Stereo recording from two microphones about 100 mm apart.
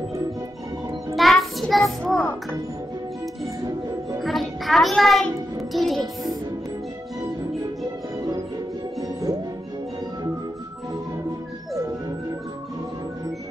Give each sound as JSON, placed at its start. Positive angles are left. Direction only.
{"t": 1.1, "sound": "child singing", "side_deg": 0}
{"t": 4.2, "sound": "music", "side_deg": 0}
{"t": 5.7, "sound": "a child's voice", "side_deg": 0}